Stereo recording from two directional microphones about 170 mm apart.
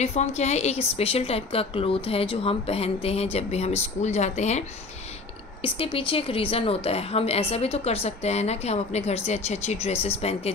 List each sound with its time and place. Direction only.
0.0 s a woman's voice: 40° left (ahead or behind)